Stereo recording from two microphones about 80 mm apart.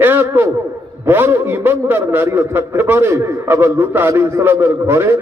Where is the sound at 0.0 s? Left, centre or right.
Right.